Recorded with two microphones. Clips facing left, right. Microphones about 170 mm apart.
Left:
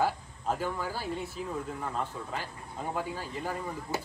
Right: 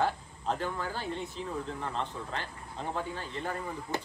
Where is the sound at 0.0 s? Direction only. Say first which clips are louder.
Left 1 dB; 5° left (ahead or behind).